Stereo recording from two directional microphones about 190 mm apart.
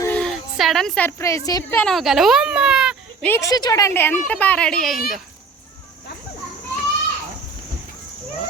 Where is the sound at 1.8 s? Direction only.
Centre (ahead or behind).